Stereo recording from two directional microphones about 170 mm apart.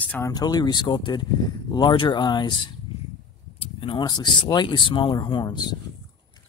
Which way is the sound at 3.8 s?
25° left (ahead or behind).